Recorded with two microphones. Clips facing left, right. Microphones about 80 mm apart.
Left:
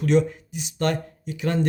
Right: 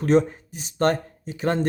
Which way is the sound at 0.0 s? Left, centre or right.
Right.